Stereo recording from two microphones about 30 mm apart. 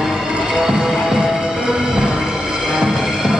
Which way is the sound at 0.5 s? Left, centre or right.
Centre.